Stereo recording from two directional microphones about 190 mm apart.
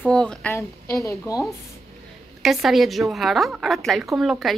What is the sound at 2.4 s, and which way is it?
Speech, centre (ahead or behind).